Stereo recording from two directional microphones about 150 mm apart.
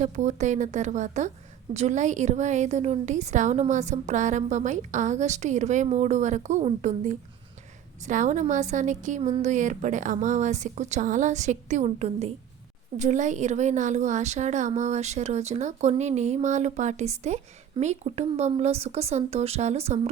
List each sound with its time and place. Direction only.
0.0 s a woman's voice: 50° right (ahead or behind)